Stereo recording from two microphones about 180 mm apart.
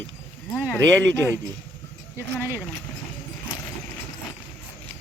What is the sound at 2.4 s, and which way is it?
Speech, 10° right (ahead or behind).